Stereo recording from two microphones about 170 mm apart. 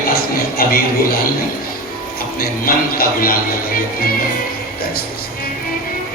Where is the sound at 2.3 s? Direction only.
60° left (ahead or behind).